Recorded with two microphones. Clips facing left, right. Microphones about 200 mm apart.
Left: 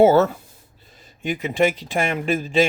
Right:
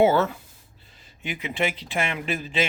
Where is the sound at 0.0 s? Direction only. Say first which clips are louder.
Left 5 dB; 45° left (ahead or behind).